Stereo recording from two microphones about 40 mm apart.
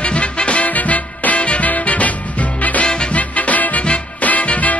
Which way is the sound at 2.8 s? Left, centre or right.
Left.